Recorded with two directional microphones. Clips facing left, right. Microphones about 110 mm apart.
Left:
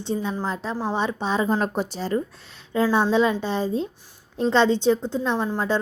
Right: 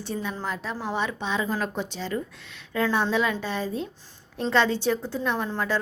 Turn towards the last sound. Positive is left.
turn(degrees=30)  # may be behind; listen again after turning